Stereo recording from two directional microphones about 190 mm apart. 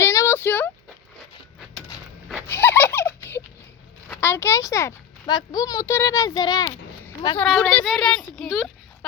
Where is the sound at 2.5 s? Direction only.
10° left (ahead or behind).